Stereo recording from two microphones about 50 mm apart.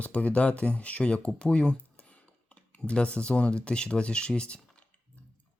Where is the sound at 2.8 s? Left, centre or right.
Left.